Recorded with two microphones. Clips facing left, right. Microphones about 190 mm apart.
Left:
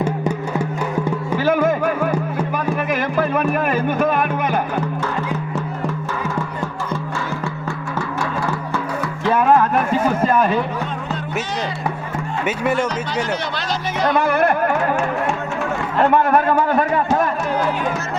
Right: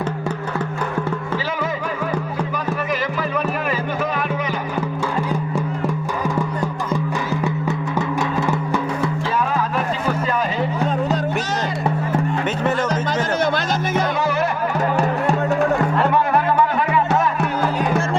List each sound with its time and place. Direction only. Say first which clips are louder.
1.5 s music: left 8 dB; 50° left (ahead or behind)
3.2 s music: left 4 dB; 55° left (ahead or behind)
9.2 s music: left 6 dB; 55° left (ahead or behind)
14.1 s music: left 4 dB; 55° left (ahead or behind)
16.3 s music: left 2 dB; 45° left (ahead or behind)